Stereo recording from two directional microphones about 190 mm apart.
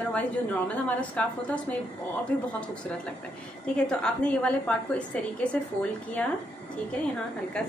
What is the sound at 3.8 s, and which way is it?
A woman's voice, 5° left (ahead or behind).